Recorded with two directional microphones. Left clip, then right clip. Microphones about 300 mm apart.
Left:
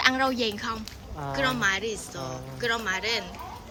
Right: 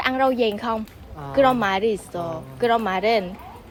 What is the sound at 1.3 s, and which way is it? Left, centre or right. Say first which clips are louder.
A woman's voice: right 7 dB; centre.